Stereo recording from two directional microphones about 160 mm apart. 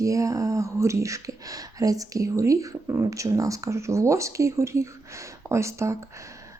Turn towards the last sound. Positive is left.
turn(degrees=-20)  # may be behind; listen again after turning